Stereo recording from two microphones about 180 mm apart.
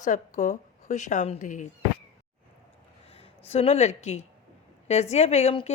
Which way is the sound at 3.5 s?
35° left (ahead or behind).